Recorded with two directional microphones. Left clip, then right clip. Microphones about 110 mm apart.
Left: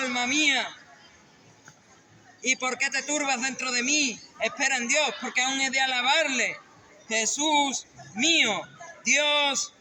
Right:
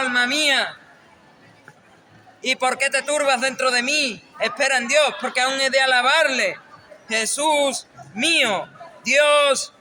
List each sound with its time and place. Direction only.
0.0 s a man's voice: 50° right (ahead or behind)
2.4 s a man's voice: 45° right (ahead or behind)